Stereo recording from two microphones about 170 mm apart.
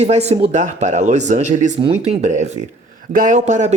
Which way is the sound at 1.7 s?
35° right (ahead or behind).